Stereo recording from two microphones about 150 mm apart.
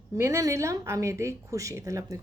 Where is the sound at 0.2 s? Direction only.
20° right (ahead or behind).